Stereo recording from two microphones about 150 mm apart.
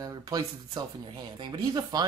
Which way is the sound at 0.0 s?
25° right (ahead or behind).